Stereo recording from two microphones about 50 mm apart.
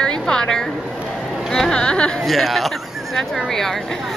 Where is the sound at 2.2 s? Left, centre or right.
Centre.